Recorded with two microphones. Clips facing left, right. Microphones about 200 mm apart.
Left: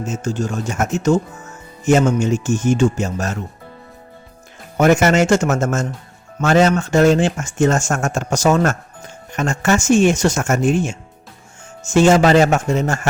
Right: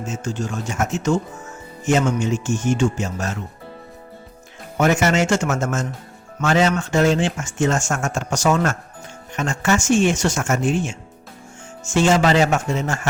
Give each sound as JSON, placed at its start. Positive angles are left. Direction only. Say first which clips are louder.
{"t": 0.2, "sound": "speech", "louder": "left 4 dB", "side_deg": 40}
{"t": 4.8, "sound": "speech", "louder": "left 4 dB", "side_deg": 45}